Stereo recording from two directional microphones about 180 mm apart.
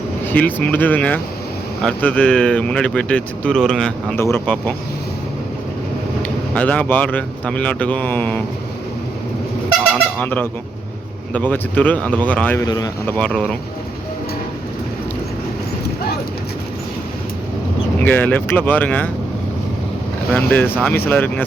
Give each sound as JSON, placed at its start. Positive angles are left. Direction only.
{"t": 0.3, "sound": "speech", "side_deg": 10}
{"t": 6.2, "sound": "speech", "side_deg": 5}
{"t": 10.2, "sound": "speech", "side_deg": 10}
{"t": 12.6, "sound": "speech", "side_deg": 20}
{"t": 13.1, "sound": "speech", "side_deg": 5}
{"t": 18.0, "sound": "speech", "side_deg": 10}
{"t": 20.3, "sound": "speech", "side_deg": 10}